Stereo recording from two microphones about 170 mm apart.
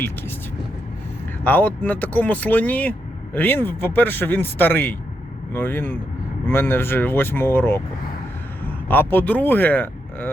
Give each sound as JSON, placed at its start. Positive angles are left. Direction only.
{"t": 1.5, "sound": "speech", "side_deg": 10}